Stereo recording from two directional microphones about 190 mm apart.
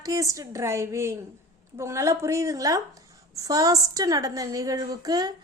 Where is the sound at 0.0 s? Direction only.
15° right (ahead or behind).